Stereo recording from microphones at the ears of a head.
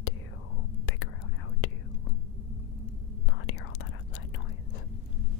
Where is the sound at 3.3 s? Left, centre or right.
Left.